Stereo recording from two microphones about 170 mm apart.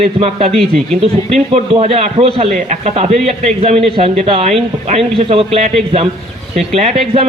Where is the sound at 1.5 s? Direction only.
35° right (ahead or behind).